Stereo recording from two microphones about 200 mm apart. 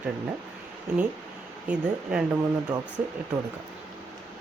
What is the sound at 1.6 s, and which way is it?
Speech, 5° right (ahead or behind).